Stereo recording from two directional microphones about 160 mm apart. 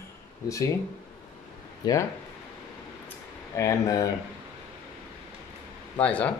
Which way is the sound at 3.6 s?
20° left (ahead or behind).